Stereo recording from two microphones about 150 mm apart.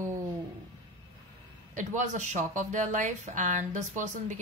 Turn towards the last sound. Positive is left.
turn(degrees=-55)  # may be behind; listen again after turning